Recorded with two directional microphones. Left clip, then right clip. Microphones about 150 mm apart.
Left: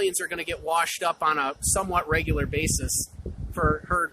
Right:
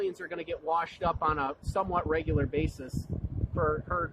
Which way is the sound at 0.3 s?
35° left (ahead or behind).